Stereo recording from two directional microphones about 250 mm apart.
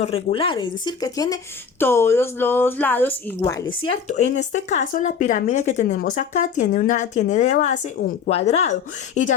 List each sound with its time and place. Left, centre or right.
0.0 s a woman's voice: left